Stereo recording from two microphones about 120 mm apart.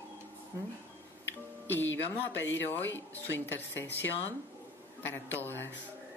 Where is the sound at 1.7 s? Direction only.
15° left (ahead or behind).